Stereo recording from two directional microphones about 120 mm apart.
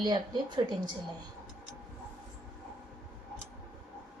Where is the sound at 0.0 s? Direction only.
40° right (ahead or behind).